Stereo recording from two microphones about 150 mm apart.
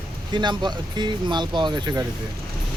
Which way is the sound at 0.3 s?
30° right (ahead or behind).